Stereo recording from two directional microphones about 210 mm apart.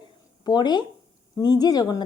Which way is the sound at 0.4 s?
20° left (ahead or behind).